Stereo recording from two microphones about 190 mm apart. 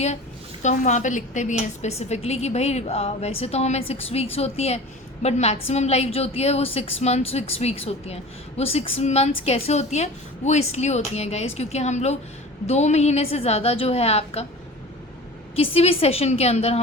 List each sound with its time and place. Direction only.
0.6 s a woman's voice: 40° left (ahead or behind)
15.5 s a woman's voice: 30° left (ahead or behind)